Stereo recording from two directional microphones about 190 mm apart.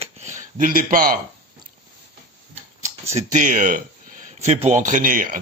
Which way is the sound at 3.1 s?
40° right (ahead or behind).